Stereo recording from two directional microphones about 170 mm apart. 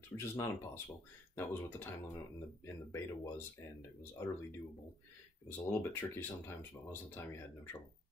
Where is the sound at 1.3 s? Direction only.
15° left (ahead or behind).